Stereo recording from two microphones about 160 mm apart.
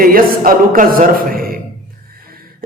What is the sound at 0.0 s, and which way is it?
A man's voice, 65° right (ahead or behind).